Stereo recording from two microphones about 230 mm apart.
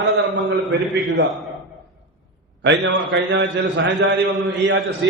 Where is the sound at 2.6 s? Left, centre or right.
Right.